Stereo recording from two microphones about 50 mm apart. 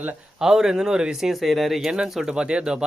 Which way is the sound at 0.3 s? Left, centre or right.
Centre.